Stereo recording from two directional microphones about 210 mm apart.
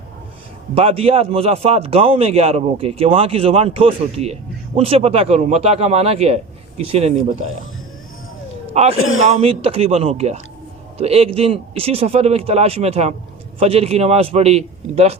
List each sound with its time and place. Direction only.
0.8 s a man's voice: 30° right (ahead or behind)
8.7 s a man's voice: 30° right (ahead or behind)
9.0 s a man's voice: 70° left (ahead or behind)
9.3 s a man's voice: 25° right (ahead or behind)